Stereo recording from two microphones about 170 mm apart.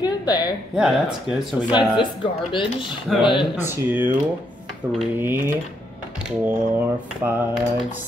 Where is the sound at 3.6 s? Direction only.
15° right (ahead or behind).